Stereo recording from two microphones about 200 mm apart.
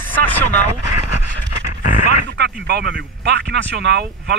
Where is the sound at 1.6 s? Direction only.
40° left (ahead or behind).